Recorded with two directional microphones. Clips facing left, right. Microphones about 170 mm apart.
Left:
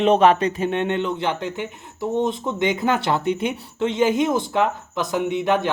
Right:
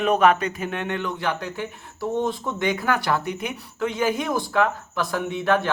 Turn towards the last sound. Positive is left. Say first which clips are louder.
# left 2 dB
turn(degrees=20)  # may be behind; listen again after turning